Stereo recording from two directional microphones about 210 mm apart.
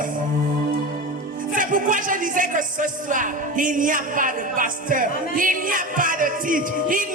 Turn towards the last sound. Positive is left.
turn(degrees=-40)  # may be behind; listen again after turning